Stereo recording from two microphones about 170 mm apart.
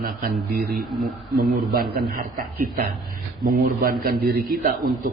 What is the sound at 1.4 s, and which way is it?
A man's voice, 60° right (ahead or behind).